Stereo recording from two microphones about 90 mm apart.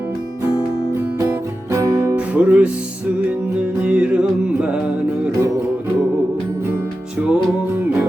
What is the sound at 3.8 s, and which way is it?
Music, 10° right (ahead or behind).